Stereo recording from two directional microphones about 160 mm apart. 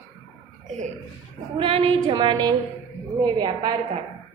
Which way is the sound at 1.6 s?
35° right (ahead or behind).